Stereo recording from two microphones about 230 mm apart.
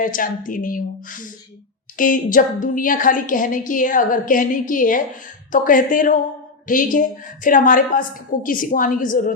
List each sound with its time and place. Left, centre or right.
0.0 s a woman's voice: left